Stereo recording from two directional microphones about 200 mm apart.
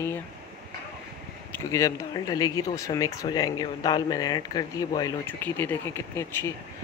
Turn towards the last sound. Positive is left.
turn(degrees=15)  # may be behind; listen again after turning